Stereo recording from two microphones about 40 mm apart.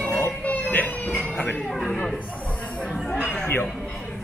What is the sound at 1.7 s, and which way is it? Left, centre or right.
Speech, centre.